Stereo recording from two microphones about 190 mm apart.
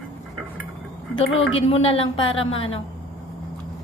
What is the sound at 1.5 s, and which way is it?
A woman's voice, 30° left (ahead or behind).